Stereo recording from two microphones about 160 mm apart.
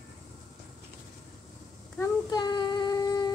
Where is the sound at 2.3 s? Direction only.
25° left (ahead or behind).